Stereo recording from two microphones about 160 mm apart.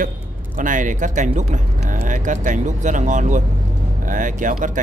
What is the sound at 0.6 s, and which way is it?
Speech, 55° right (ahead or behind).